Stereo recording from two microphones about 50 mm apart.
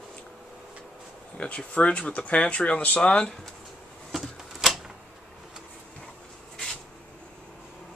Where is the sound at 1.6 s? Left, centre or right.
Left.